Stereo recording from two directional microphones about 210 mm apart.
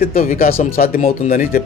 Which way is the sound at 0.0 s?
40° left (ahead or behind).